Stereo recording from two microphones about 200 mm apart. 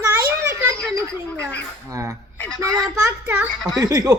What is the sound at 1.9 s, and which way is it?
Speech, 15° right (ahead or behind).